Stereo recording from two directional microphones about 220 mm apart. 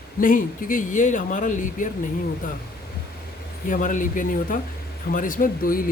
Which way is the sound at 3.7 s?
35° left (ahead or behind).